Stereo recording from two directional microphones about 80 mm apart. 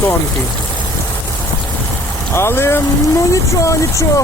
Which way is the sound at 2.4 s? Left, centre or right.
Left.